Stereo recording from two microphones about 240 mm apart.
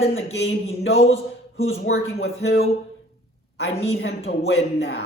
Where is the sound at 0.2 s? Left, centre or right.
Left.